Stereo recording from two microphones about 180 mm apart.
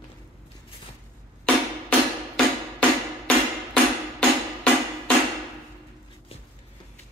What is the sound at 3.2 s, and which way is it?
Music, 5° left (ahead or behind).